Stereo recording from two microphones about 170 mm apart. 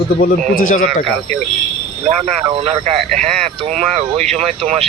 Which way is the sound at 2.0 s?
35° right (ahead or behind).